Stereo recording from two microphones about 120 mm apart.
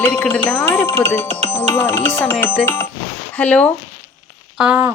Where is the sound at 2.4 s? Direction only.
15° left (ahead or behind).